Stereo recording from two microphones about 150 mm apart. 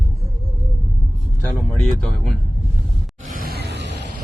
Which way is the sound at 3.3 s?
85° right.